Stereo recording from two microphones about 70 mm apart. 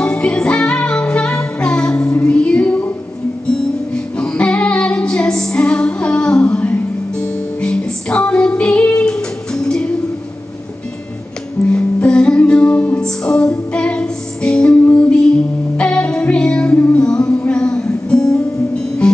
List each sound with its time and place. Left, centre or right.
0.0 s music: centre
11.7 s music: centre